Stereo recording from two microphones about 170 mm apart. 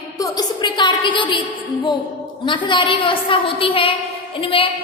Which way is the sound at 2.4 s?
30° left (ahead or behind).